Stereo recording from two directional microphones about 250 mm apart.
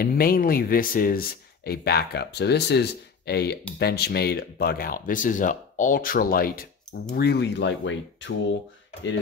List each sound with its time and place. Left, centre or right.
0.0 s speech: left